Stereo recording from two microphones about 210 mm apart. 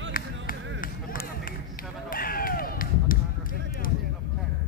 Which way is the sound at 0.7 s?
45° left (ahead or behind).